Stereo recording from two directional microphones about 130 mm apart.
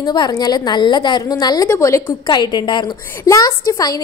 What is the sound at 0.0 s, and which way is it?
A woman's voice, 35° left (ahead or behind).